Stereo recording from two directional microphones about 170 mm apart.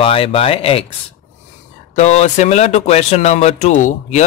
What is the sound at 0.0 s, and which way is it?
Speech, 35° left (ahead or behind).